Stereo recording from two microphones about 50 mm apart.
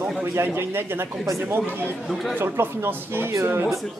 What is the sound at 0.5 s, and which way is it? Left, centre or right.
Speech, right.